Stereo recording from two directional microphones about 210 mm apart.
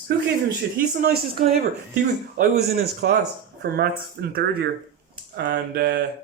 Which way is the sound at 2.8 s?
50° right (ahead or behind).